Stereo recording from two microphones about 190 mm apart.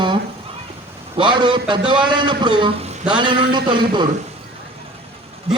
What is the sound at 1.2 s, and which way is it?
A man's voice, 25° right (ahead or behind).